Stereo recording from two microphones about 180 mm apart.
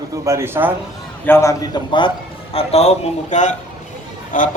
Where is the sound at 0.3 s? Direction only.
15° right (ahead or behind).